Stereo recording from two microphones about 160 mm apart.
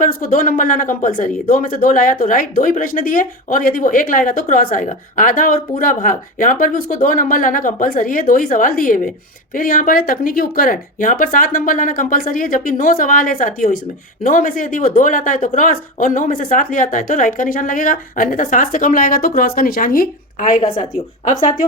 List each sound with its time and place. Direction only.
0.0 s speech: 55° left (ahead or behind)